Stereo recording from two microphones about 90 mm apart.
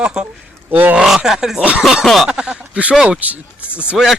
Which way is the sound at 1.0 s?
5° right (ahead or behind).